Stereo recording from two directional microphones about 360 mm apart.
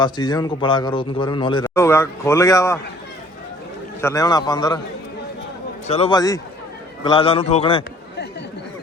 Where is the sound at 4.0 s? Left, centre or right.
Centre.